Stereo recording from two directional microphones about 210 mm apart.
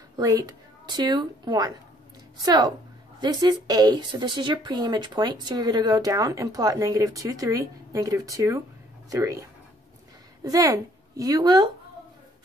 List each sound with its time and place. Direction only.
0.2 s a woman's voice: 15° right (ahead or behind)